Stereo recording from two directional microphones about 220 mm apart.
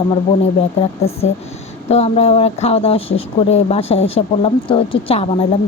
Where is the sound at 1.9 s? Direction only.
30° left (ahead or behind).